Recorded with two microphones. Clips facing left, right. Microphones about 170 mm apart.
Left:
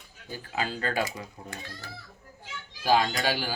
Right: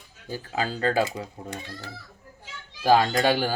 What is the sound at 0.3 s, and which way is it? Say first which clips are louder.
Speech: right 3 dB; 35° right (ahead or behind).